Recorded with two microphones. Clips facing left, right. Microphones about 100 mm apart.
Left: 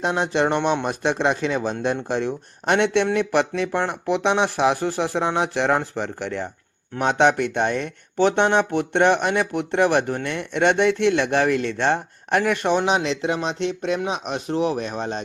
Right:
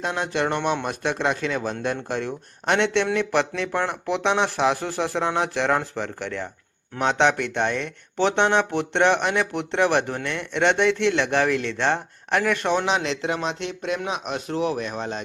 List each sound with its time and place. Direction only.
0.0 s speech: 25° left (ahead or behind)